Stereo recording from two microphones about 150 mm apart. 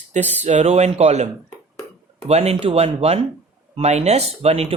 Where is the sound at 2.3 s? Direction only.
45° right (ahead or behind).